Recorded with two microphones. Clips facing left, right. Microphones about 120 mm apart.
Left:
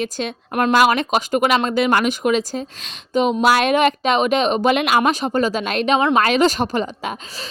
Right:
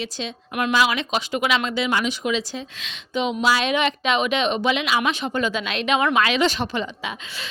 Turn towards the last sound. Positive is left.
turn(degrees=40)  # may be behind; listen again after turning